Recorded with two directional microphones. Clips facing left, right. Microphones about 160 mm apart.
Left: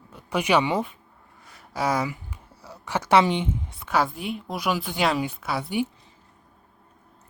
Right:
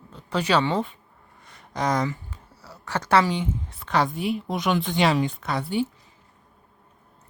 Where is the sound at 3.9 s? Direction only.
5° left (ahead or behind).